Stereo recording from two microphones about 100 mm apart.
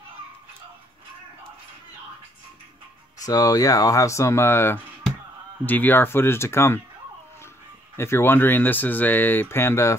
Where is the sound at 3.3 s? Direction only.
35° left (ahead or behind).